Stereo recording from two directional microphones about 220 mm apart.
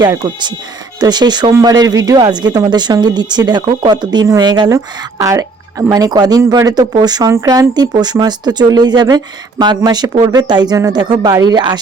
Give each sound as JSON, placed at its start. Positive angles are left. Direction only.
{"t": 0.0, "sound": "speech", "side_deg": -20}